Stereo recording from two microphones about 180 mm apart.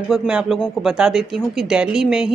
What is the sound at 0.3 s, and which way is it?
Speech, 5° right (ahead or behind).